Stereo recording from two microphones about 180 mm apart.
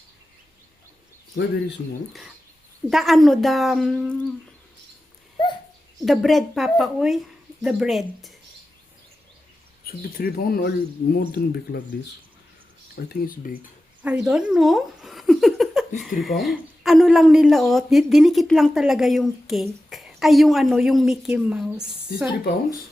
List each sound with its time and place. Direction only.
2.9 s speech: centre (ahead or behind)
6.1 s speech: centre (ahead or behind)
9.8 s speech: 55° left (ahead or behind)
14.0 s speech: 5° right (ahead or behind)